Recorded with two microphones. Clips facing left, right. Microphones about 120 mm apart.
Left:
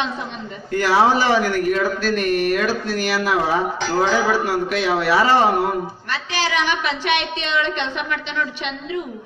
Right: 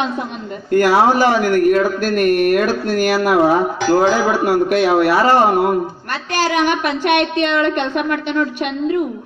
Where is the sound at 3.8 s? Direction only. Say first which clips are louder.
Right 6 dB; 10° right (ahead or behind).